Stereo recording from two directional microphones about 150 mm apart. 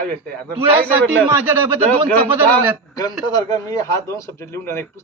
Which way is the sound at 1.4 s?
15° right (ahead or behind).